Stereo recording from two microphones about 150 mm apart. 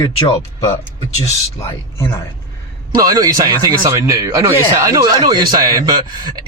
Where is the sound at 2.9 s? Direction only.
25° right (ahead or behind).